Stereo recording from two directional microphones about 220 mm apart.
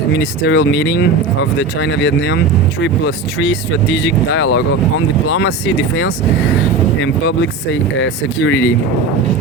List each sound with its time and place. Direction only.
0.4 s speech: 50° left (ahead or behind)
4.3 s speech: 90° left
7.0 s speech: 55° left (ahead or behind)